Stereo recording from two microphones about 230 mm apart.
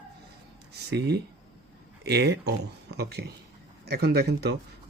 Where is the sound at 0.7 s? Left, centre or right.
Right.